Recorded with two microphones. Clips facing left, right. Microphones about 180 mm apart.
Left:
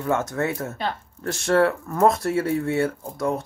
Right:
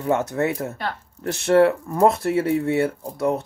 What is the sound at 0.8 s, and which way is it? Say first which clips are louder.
Speech: left 1 dB; 20° left (ahead or behind).